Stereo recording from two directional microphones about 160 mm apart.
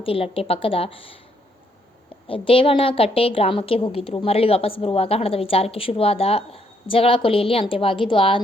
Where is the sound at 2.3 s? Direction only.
35° left (ahead or behind).